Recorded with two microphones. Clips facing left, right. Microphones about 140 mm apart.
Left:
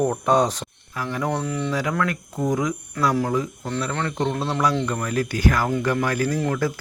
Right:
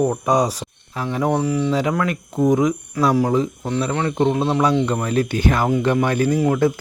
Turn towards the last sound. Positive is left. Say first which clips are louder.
# right 6 dB
turn(degrees=-20)  # may be behind; listen again after turning